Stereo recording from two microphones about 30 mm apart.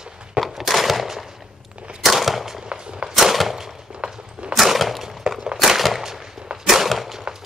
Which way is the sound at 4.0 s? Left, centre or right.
Right.